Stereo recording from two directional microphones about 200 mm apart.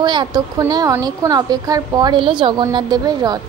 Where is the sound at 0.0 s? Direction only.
20° right (ahead or behind).